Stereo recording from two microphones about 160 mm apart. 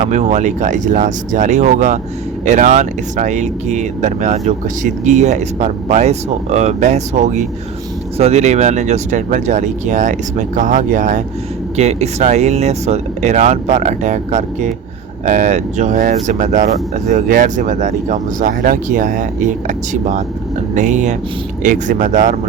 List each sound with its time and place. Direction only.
0.0 s speech: 45° right (ahead or behind)